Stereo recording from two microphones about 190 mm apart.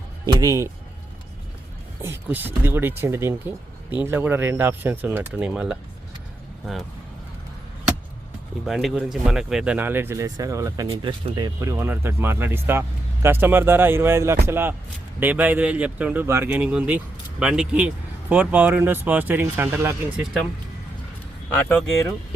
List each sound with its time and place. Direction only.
0.3 s speech: 15° right (ahead or behind)
2.0 s speech: 10° right (ahead or behind)
8.6 s speech: centre (ahead or behind)
10.8 s speech: 25° right (ahead or behind); by 20.2 s 10° right (ahead or behind)
21.5 s speech: 10° left (ahead or behind)